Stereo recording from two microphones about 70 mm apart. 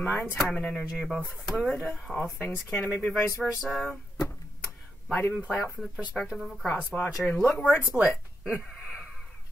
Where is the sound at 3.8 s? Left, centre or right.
Left.